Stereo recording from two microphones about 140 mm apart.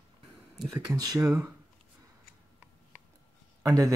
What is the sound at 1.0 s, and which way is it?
Speech, 25° right (ahead or behind).